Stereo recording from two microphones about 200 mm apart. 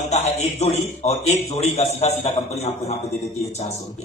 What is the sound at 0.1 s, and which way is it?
A man's voice, 35° left (ahead or behind).